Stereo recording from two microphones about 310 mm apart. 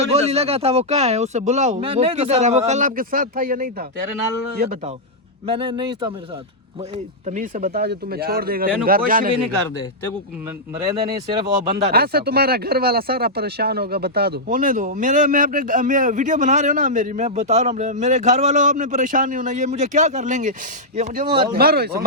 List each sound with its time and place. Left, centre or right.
0.1 s speech: centre
5.5 s speech: centre
11.4 s speech: right
21.5 s speech: right